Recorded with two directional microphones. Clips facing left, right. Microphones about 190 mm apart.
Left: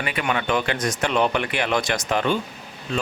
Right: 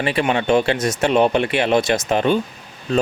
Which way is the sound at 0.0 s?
30° right (ahead or behind).